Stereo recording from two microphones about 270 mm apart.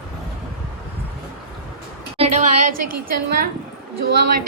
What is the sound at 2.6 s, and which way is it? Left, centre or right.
A woman's voice, right.